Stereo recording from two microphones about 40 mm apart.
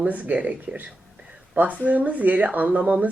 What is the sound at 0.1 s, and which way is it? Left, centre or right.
Speech, right.